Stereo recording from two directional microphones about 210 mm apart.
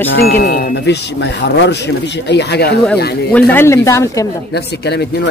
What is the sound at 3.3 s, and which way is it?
Speech, 10° left (ahead or behind).